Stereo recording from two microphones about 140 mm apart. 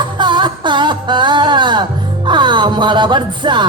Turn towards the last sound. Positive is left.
turn(degrees=-35)  # may be behind; listen again after turning